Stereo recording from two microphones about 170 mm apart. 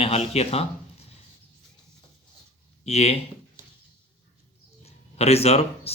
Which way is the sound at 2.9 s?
40° left (ahead or behind).